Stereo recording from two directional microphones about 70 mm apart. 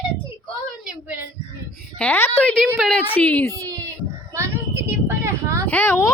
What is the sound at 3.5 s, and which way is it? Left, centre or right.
Speech, right.